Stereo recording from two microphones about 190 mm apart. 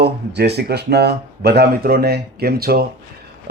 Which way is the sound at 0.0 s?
60° right (ahead or behind).